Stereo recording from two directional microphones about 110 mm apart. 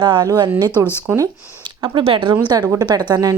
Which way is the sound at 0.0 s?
45° right (ahead or behind).